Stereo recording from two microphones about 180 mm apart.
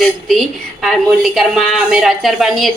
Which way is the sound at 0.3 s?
Centre (ahead or behind).